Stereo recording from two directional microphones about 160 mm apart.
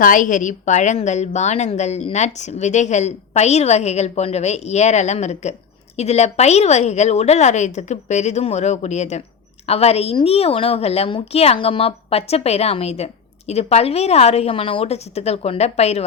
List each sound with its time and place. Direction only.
0.0 s a woman's voice: 55° left (ahead or behind)